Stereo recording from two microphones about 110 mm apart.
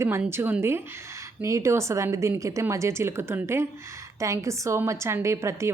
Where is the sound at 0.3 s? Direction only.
20° right (ahead or behind).